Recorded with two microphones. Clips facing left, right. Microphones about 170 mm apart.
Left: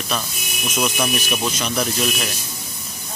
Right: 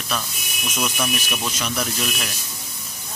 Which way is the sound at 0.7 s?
10° left (ahead or behind).